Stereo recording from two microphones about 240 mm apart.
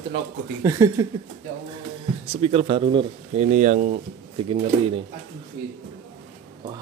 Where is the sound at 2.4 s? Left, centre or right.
Right.